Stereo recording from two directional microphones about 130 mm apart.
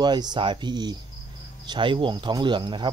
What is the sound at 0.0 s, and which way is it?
Speech, 35° right (ahead or behind).